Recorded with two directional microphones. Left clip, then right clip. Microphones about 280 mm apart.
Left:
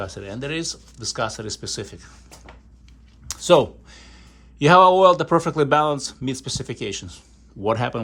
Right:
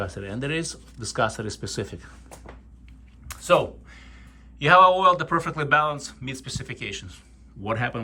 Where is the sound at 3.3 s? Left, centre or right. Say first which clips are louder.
Left 4 dB; left.